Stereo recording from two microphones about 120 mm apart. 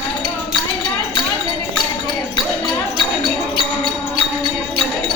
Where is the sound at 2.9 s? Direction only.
40° left (ahead or behind).